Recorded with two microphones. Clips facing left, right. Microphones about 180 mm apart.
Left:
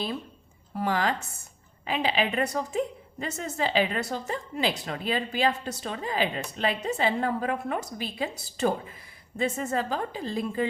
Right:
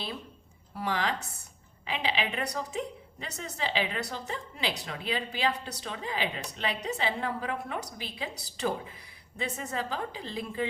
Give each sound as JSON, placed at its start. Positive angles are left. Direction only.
{"t": 0.7, "sound": "a woman's voice", "side_deg": 45}